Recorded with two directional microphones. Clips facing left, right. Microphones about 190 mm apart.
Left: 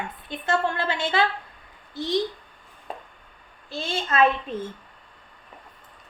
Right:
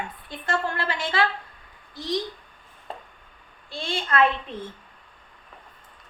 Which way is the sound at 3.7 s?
25° left (ahead or behind).